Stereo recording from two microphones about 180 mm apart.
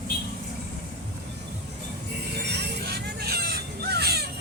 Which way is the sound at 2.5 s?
65° right (ahead or behind).